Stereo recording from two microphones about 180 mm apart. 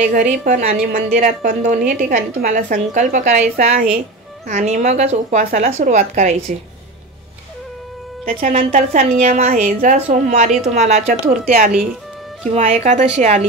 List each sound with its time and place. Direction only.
0.0 s a woman's voice: 45° right (ahead or behind)
8.5 s a woman's voice: 35° right (ahead or behind)